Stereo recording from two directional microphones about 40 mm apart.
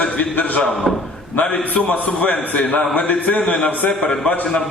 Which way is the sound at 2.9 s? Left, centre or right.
Left.